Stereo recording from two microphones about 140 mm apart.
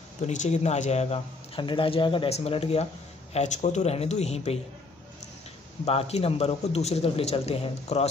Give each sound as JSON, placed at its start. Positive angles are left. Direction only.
{"t": 0.3, "sound": "speech", "side_deg": 55}
{"t": 1.6, "sound": "speech", "side_deg": 35}
{"t": 3.3, "sound": "speech", "side_deg": 55}
{"t": 5.9, "sound": "speech", "side_deg": 45}